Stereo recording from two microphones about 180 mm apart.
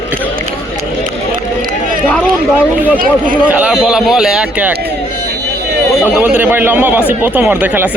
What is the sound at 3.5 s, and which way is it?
A man's voice, 5° right (ahead or behind).